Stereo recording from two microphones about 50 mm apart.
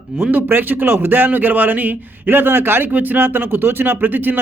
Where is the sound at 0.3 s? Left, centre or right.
Right.